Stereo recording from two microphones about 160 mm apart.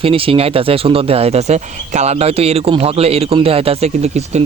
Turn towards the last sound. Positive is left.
turn(degrees=-40)  # may be behind; listen again after turning